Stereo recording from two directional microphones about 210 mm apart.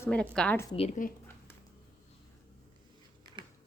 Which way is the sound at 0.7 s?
30° left (ahead or behind).